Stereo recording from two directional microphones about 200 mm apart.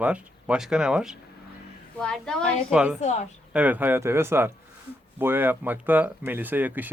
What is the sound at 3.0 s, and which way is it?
Speech, 35° left (ahead or behind).